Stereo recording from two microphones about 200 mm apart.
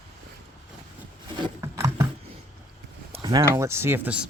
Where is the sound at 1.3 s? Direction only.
20° right (ahead or behind).